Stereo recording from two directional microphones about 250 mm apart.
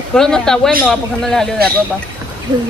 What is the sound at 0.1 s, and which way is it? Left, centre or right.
A man's voice, centre.